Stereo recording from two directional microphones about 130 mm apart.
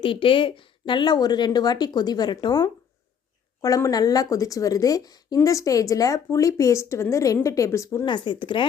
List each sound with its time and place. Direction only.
0.0 s speech: 40° left (ahead or behind); by 8.0 s 20° left (ahead or behind)
8.0 s speech: 35° left (ahead or behind)